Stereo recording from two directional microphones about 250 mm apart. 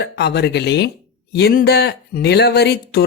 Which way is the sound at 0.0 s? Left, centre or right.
Left.